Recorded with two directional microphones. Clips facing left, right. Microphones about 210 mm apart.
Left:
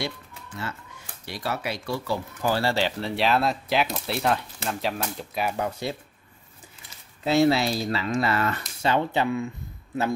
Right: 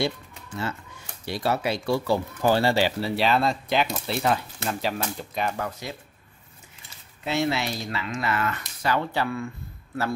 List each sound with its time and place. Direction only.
0.0 s bird: 25° right (ahead or behind)
1.2 s speech: 30° right (ahead or behind)
2.7 s speech: 5° right (ahead or behind)
5.6 s speech: 30° left (ahead or behind)
7.2 s speech: 35° left (ahead or behind); by 9.5 s 20° left (ahead or behind)